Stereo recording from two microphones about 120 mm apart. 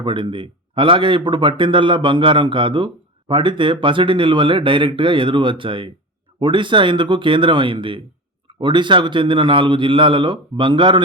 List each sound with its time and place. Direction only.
0.0 s speech: 40° right (ahead or behind)